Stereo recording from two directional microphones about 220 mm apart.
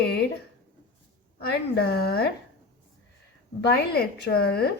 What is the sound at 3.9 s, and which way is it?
Speech, 45° left (ahead or behind).